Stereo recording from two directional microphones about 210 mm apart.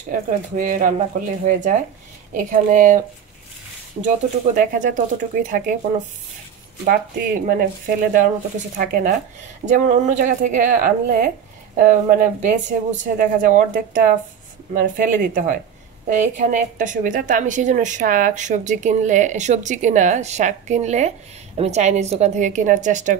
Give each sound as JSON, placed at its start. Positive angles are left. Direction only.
{"t": 0.3, "sound": "a woman's voice", "side_deg": -40}
{"t": 4.6, "sound": "a woman's voice", "side_deg": -40}